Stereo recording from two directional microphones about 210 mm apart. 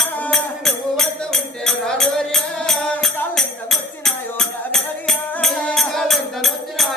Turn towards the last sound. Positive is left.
turn(degrees=0)  # may be behind; listen again after turning